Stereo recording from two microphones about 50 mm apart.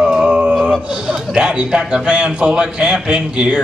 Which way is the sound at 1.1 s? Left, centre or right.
Centre.